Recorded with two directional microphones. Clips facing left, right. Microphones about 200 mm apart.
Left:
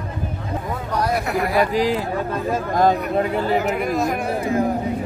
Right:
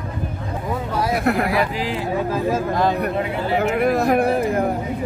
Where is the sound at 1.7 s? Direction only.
40° left (ahead or behind).